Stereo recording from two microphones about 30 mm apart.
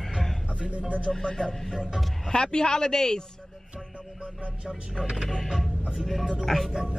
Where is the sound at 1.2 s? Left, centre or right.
Left.